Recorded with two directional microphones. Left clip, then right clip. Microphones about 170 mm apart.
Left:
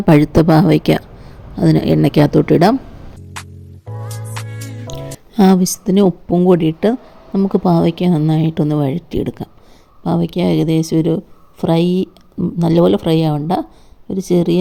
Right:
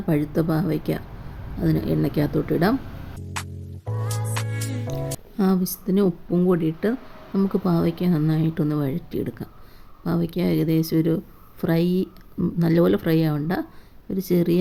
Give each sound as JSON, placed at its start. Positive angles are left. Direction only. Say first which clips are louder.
{"t": 0.0, "sound": "speech", "louder": "left 12 dB", "side_deg": 50}
{"t": 3.3, "sound": "music", "louder": "left 1 dB", "side_deg": 0}
{"t": 5.4, "sound": "speech", "louder": "left 11 dB", "side_deg": 45}
{"t": 6.3, "sound": "speech", "louder": "left 10 dB", "side_deg": 25}
{"t": 6.6, "sound": "speech", "louder": "left 9 dB", "side_deg": 35}